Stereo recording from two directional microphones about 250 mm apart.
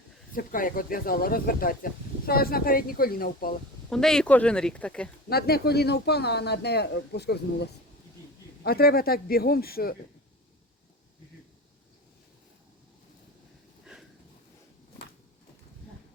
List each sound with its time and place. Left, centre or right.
0.3 s speech: left
3.8 s speech: centre
5.3 s speech: left